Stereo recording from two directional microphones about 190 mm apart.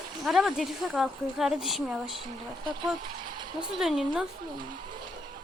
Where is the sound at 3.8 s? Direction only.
5° right (ahead or behind).